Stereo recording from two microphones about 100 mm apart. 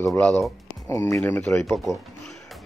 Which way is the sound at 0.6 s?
25° left (ahead or behind).